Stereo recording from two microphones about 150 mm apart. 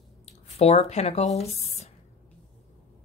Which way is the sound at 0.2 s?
45° left (ahead or behind).